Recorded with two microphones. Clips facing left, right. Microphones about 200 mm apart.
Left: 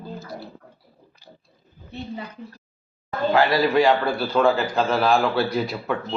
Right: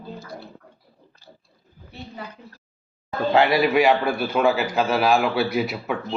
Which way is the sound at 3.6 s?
10° right (ahead or behind).